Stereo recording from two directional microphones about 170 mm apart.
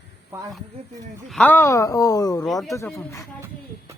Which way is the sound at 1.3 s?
10° left (ahead or behind).